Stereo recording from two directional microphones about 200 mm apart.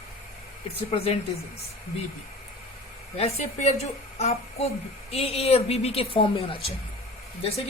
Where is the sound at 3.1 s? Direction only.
30° left (ahead or behind).